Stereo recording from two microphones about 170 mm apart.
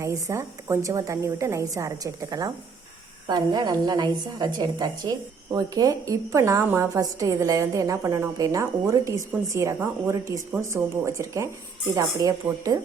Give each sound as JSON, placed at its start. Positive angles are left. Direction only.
{"t": 0.0, "sound": "a woman's voice", "side_deg": -20}